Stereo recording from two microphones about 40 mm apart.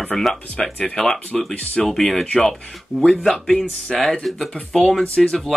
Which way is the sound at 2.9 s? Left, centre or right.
Centre.